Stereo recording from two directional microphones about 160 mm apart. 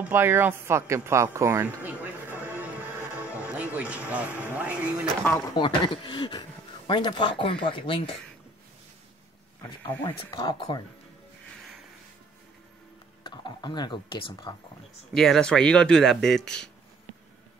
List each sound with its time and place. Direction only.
0.0 s speech: 15° right (ahead or behind)
3.4 s a sound: 10° right (ahead or behind)
5.5 s speech: 25° left (ahead or behind)
9.6 s speech: 30° left (ahead or behind)
13.2 s speech: 30° left (ahead or behind)
15.1 s speech: 5° left (ahead or behind)